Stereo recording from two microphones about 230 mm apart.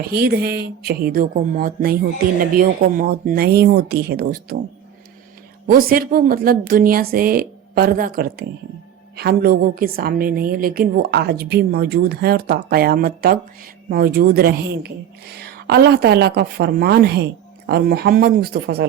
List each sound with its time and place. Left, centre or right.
0.0 s a woman's voice: right
5.6 s a woman's voice: right